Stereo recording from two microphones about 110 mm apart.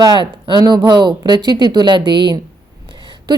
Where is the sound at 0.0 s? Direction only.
40° right (ahead or behind).